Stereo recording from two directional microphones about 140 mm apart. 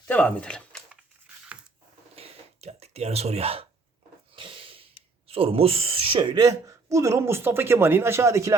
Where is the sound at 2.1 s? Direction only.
45° right (ahead or behind).